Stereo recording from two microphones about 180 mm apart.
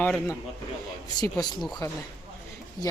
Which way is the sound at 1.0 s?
20° left (ahead or behind).